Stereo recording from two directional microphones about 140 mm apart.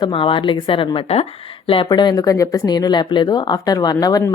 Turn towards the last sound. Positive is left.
turn(degrees=25)  # may be behind; listen again after turning